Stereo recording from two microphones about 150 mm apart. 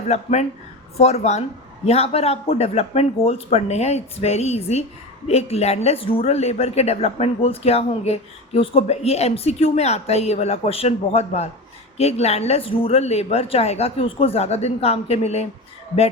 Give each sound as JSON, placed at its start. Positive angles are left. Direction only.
{"t": 0.1, "sound": "speech", "side_deg": 50}